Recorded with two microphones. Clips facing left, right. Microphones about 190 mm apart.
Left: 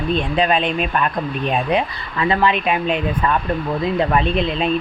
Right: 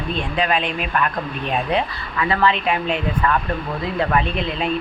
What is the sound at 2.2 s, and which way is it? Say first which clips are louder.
Speech: left 2 dB; 20° left (ahead or behind).